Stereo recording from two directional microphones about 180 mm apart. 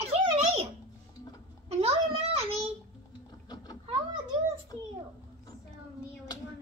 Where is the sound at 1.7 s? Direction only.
35° right (ahead or behind).